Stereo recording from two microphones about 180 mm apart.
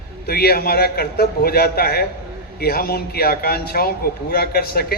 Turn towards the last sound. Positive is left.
turn(degrees=60)  # may be behind; listen again after turning